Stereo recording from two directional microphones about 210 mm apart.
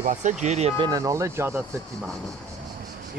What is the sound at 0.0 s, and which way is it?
Speech, 35° right (ahead or behind).